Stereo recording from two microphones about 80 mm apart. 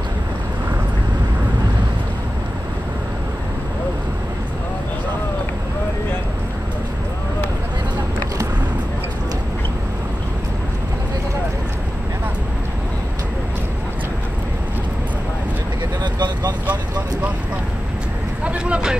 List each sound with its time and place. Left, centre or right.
16.0 s vehicle: right
18.4 s vehicle: centre